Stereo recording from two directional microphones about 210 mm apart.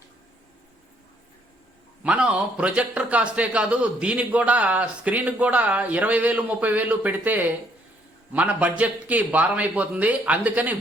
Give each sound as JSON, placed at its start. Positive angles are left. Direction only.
{"t": 2.0, "sound": "a man's voice", "side_deg": -5}